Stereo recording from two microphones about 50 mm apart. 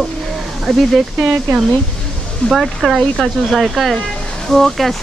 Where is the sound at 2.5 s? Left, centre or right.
Centre.